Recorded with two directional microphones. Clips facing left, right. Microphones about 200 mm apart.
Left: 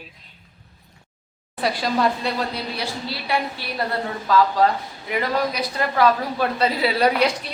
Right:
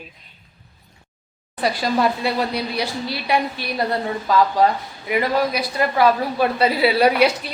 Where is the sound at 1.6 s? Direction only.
Centre (ahead or behind).